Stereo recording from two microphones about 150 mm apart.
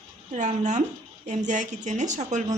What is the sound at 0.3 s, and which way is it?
A woman's voice, 55° right (ahead or behind).